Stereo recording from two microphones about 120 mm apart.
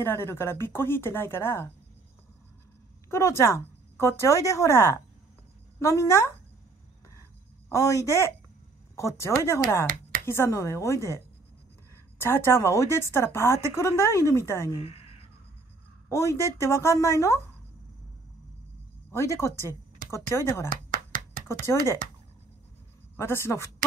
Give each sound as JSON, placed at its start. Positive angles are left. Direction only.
{"t": 0.0, "sound": "speech", "side_deg": 20}
{"t": 3.1, "sound": "speech", "side_deg": 25}
{"t": 7.7, "sound": "speech", "side_deg": 25}
{"t": 12.2, "sound": "speech", "side_deg": 20}
{"t": 16.1, "sound": "speech", "side_deg": 25}
{"t": 19.1, "sound": "speech", "side_deg": 25}
{"t": 23.1, "sound": "speech", "side_deg": 20}